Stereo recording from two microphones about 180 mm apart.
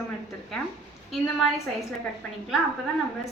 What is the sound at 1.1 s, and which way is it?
Speech, centre (ahead or behind).